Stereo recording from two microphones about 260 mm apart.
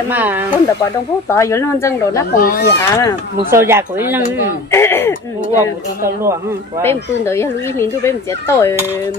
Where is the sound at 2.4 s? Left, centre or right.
Left.